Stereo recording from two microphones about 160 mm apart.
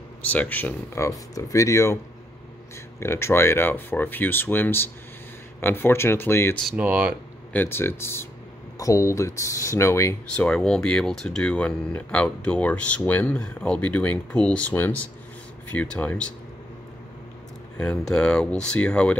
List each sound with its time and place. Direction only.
0.2 s speech: 10° left (ahead or behind)
3.0 s speech: 15° left (ahead or behind)
6.8 s speech: 10° right (ahead or behind)
7.5 s speech: 15° left (ahead or behind)
10.3 s speech: 5° left (ahead or behind)
17.7 s speech: 5° left (ahead or behind)